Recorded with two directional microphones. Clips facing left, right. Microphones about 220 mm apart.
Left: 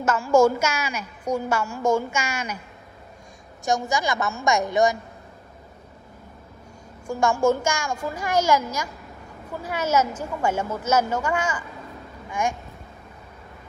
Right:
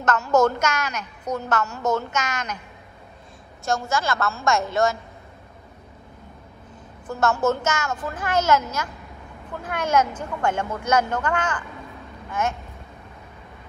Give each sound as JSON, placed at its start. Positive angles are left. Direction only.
{"t": 0.0, "sound": "a woman's voice", "side_deg": 10}
{"t": 3.6, "sound": "a woman's voice", "side_deg": 15}
{"t": 7.1, "sound": "a woman's voice", "side_deg": 10}